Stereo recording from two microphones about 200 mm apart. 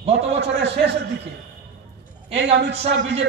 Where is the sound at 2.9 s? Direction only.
60° right (ahead or behind).